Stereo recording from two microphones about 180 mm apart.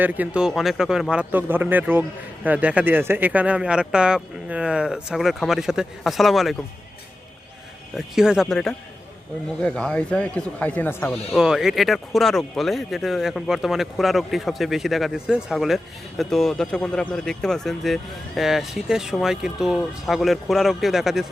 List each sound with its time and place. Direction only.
0.0 s speech: 10° right (ahead or behind)
7.9 s speech: 5° right (ahead or behind)
11.3 s speech: 5° right (ahead or behind)